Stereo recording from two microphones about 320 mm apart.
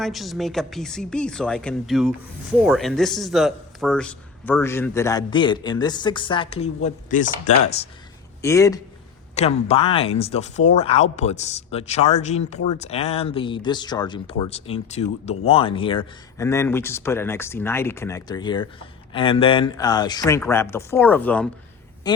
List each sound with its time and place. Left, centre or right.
0.0 s speech: centre; by 7.5 s left
8.4 s speech: centre